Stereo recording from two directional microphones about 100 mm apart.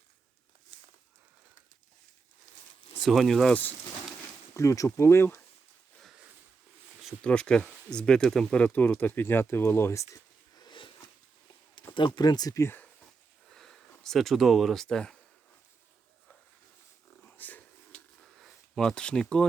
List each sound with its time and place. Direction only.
3.0 s speech: centre (ahead or behind)
3.5 s speech: 20° left (ahead or behind)
4.5 s speech: 30° left (ahead or behind)
7.2 s speech: 10° left (ahead or behind); by 10.1 s 25° left (ahead or behind)
10.6 s a sound: 55° left (ahead or behind)
11.9 s speech: 50° left (ahead or behind)
12.5 s speech: 25° left (ahead or behind)
13.5 s a sound: 5° left (ahead or behind)
14.0 s speech: centre (ahead or behind)
17.2 s a sound: 20° left (ahead or behind)
18.3 s speech: centre (ahead or behind)